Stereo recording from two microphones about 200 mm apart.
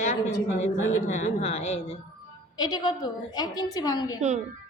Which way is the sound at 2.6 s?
20° left (ahead or behind).